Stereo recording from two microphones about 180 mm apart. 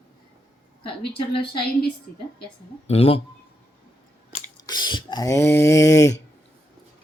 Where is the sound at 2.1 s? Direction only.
50° left (ahead or behind).